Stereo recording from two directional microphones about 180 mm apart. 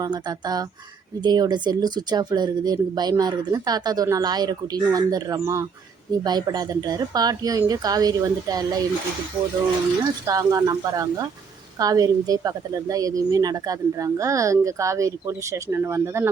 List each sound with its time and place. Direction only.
0.0 s speech: 20° right (ahead or behind)
10.2 s speech: 20° right (ahead or behind)